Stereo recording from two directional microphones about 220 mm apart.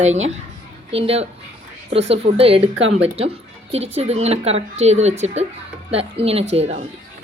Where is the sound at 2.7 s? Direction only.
60° right (ahead or behind).